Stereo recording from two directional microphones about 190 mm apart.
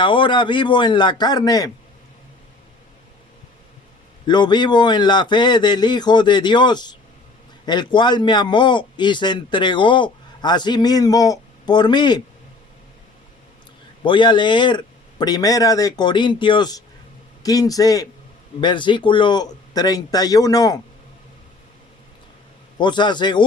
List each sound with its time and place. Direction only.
0.0 s a man's voice: 25° left (ahead or behind)
4.3 s a man's voice: 25° left (ahead or behind)
14.0 s a man's voice: 25° left (ahead or behind)
22.8 s a man's voice: 25° left (ahead or behind)